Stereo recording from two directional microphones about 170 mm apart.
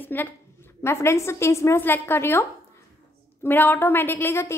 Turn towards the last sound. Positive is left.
turn(degrees=15)  # may be behind; listen again after turning